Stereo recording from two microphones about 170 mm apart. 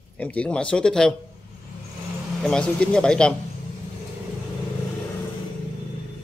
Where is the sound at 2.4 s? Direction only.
5° left (ahead or behind).